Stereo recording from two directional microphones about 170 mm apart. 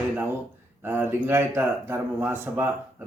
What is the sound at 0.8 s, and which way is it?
Speech, 15° right (ahead or behind).